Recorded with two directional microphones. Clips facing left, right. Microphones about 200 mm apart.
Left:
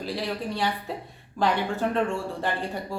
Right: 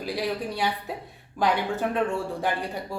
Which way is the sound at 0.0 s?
10° right (ahead or behind).